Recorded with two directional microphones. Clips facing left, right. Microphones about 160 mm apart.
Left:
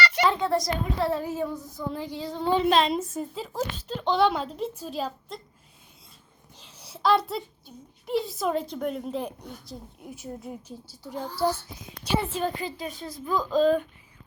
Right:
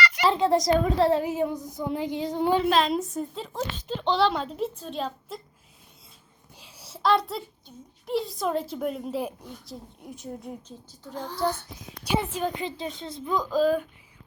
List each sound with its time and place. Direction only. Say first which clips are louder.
0.3 s a child's voice: right 7 dB; 30° right (ahead or behind); by 2.6 s 15° right (ahead or behind)
2.6 s a woman's voice: left 1 dB; centre (ahead or behind)
6.6 s a sound: even; 10° right (ahead or behind)
8.0 s a woman's voice: left 1 dB; centre (ahead or behind)
12.0 s a child's voice: even; 15° right (ahead or behind)